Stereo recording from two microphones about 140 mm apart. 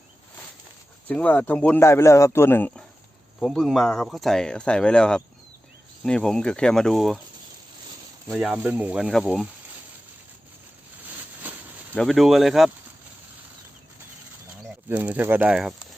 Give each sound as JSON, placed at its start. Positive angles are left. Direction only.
{"t": 1.0, "sound": "a man's voice", "side_deg": 10}
{"t": 3.4, "sound": "speech", "side_deg": 0}
{"t": 8.3, "sound": "speech", "side_deg": -5}
{"t": 11.9, "sound": "speech", "side_deg": 0}
{"t": 14.8, "sound": "speech", "side_deg": -15}